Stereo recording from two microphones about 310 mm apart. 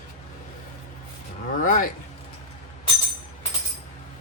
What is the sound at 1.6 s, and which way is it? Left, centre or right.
Speech, left.